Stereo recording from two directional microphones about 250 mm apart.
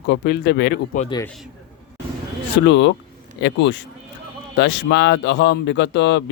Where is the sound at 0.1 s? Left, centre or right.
Left.